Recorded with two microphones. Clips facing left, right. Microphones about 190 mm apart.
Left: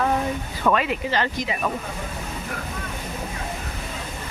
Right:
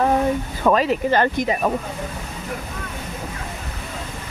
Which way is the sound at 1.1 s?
50° right (ahead or behind).